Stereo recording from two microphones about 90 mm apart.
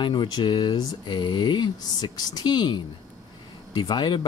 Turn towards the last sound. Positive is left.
turn(degrees=50)  # may be behind; listen again after turning